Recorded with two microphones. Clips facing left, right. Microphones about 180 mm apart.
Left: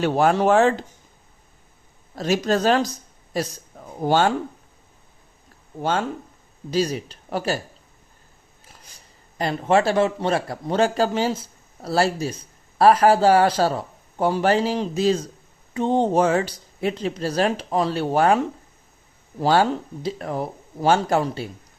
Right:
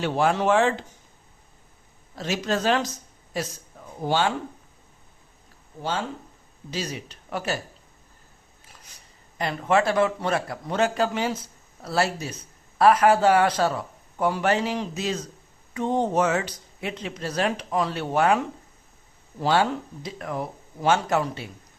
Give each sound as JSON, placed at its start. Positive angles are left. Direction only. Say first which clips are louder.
{"t": 0.0, "sound": "speech", "louder": "left 4 dB", "side_deg": 45}
{"t": 2.1, "sound": "speech", "louder": "left 5 dB", "side_deg": 40}
{"t": 4.0, "sound": "speech", "louder": "left 5 dB", "side_deg": 45}
{"t": 6.7, "sound": "speech", "louder": "left 9 dB", "side_deg": 40}
{"t": 9.4, "sound": "speech", "louder": "left 3 dB", "side_deg": 30}